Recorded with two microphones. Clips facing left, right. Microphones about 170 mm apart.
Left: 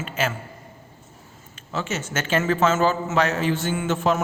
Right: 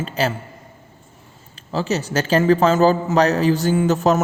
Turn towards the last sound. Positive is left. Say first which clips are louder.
# right 6 dB
turn(degrees=-40)  # may be behind; listen again after turning